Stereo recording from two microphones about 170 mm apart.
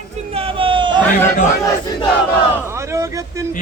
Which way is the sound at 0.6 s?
30° right (ahead or behind).